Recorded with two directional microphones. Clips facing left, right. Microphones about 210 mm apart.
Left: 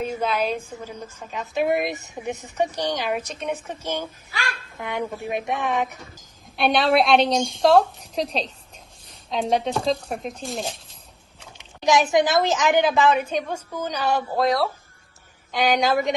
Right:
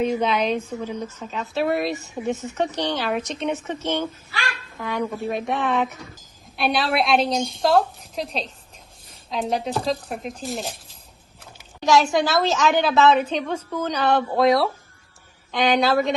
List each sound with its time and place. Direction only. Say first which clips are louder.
0.2 s speech: right 2 dB; 5° left (ahead or behind)
6.6 s a woman's voice: left 3 dB; 5° right (ahead or behind)
11.8 s speech: even; 15° left (ahead or behind)